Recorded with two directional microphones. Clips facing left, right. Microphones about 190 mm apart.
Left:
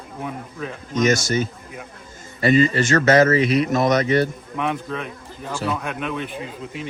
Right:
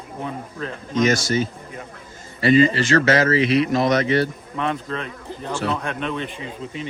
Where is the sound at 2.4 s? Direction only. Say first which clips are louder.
Right 1 dB; 45° left (ahead or behind).